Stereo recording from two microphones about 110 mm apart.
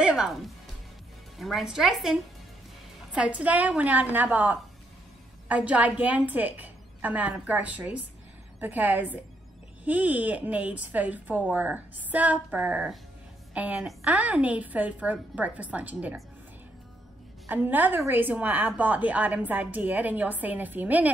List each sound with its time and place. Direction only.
0.0 s music: 5° right (ahead or behind)
1.4 s a woman's voice: centre (ahead or behind)
17.5 s a woman's voice: 15° right (ahead or behind)